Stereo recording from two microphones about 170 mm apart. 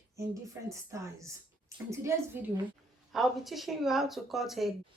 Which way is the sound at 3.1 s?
Centre (ahead or behind).